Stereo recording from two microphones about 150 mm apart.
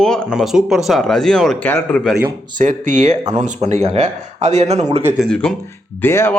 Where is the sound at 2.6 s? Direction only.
55° right (ahead or behind).